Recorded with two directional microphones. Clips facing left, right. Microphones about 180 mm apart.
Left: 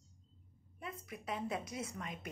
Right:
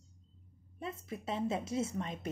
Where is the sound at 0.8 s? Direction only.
25° right (ahead or behind).